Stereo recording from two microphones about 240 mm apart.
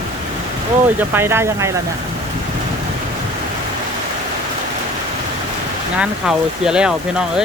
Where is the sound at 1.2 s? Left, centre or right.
Centre.